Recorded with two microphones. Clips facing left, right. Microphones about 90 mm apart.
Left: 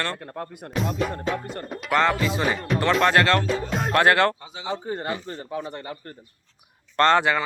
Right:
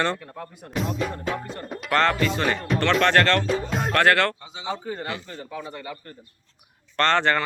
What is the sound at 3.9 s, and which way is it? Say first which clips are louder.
Speech: left 1 dB; 20° left (ahead or behind).